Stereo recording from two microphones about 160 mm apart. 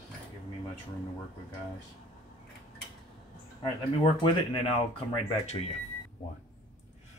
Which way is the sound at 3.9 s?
35° left (ahead or behind).